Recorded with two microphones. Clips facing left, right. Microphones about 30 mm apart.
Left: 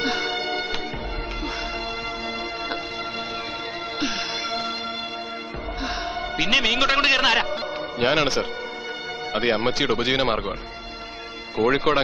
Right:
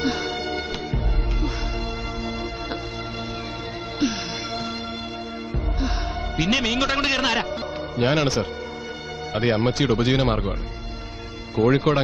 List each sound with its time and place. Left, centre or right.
0.0 s music: centre
6.3 s a man's voice: centre
11.5 s a man's voice: centre